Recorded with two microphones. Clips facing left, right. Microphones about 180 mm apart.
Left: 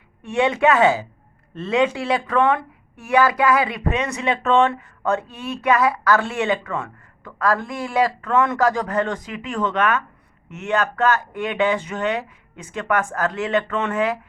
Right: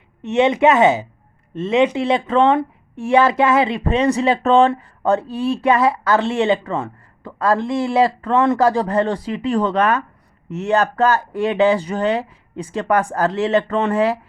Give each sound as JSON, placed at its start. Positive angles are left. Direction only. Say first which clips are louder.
{"t": 0.2, "sound": "speech", "louder": "right 4 dB", "side_deg": -20}